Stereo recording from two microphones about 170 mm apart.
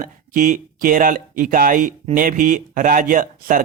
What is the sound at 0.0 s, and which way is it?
Speech, 55° right (ahead or behind).